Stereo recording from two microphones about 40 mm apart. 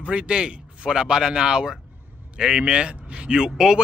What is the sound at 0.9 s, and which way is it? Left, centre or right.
Speech, centre.